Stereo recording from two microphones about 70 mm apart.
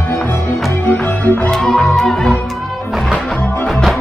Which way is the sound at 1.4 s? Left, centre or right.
Centre.